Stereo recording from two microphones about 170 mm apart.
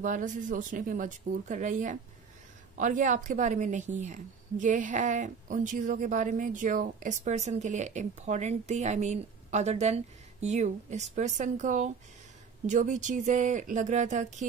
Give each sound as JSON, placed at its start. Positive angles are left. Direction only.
{"t": 0.0, "sound": "a woman's voice", "side_deg": -50}